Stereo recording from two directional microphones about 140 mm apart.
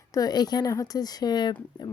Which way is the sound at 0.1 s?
25° left (ahead or behind).